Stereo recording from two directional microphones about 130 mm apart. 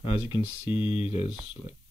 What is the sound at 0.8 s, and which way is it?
Speech, 45° left (ahead or behind).